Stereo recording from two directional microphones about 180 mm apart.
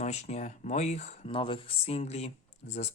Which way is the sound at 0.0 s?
40° left (ahead or behind).